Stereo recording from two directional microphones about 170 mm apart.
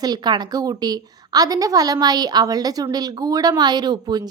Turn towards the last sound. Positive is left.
turn(degrees=-25)  # may be behind; listen again after turning